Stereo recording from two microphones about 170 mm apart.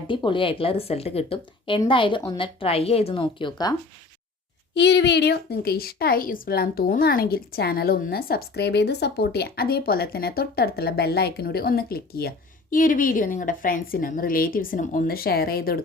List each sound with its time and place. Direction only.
0.1 s a woman's voice: 30° left (ahead or behind)
4.7 s a woman's voice: 90° left; by 12.3 s 65° left (ahead or behind)
12.7 s a woman's voice: 55° left (ahead or behind)